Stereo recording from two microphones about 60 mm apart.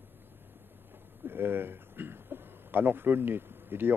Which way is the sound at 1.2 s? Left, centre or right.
Right.